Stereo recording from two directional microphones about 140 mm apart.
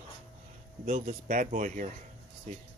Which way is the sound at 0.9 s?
70° right (ahead or behind).